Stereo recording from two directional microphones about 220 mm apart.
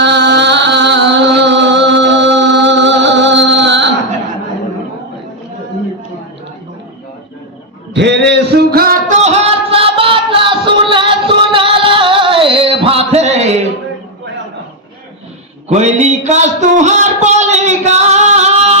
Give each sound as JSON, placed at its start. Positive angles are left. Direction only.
{"t": 0.0, "sound": "music", "side_deg": -50}
{"t": 7.9, "sound": "music", "side_deg": -50}
{"t": 15.7, "sound": "a sound", "side_deg": -30}